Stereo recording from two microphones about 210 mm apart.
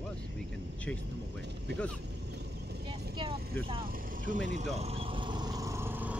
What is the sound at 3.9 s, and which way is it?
Vehicle, 40° right (ahead or behind).